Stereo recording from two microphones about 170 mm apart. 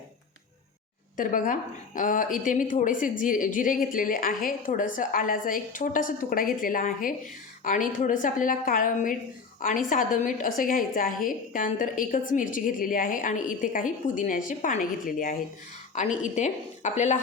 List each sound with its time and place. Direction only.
1.1 s a woman's voice: 50° left (ahead or behind)